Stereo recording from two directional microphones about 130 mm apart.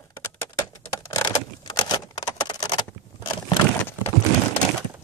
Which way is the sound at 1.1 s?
30° left (ahead or behind).